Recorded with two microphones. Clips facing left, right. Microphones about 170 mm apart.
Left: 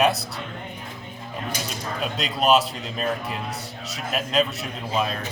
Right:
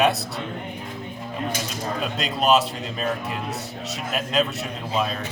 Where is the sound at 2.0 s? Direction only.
Centre (ahead or behind).